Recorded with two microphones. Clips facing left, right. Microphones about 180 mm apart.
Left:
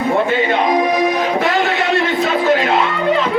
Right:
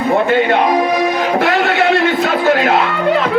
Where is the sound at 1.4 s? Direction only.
70° right (ahead or behind).